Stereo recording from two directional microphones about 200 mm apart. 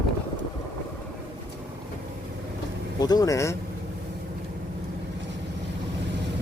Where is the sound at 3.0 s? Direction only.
20° left (ahead or behind).